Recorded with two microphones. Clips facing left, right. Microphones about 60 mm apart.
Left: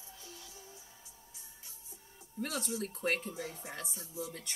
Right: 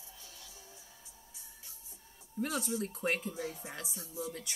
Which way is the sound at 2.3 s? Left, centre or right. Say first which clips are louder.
Right 3 dB; centre.